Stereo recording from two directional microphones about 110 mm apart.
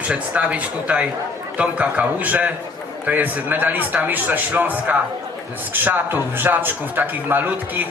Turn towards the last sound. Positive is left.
turn(degrees=-20)  # may be behind; listen again after turning